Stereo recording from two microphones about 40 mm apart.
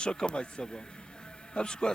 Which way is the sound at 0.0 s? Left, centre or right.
Left.